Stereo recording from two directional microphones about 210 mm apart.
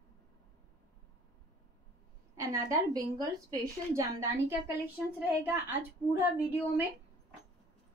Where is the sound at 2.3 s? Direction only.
15° right (ahead or behind).